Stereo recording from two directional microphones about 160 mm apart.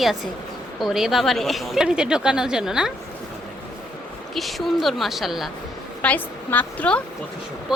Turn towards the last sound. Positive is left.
turn(degrees=10)  # may be behind; listen again after turning